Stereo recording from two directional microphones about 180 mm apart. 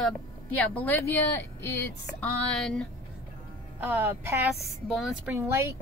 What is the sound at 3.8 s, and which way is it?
Speech, 10° right (ahead or behind).